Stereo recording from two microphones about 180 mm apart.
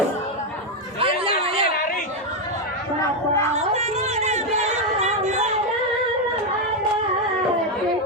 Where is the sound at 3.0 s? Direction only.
15° left (ahead or behind).